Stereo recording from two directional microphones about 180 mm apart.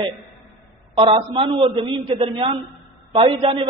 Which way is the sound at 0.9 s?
30° right (ahead or behind).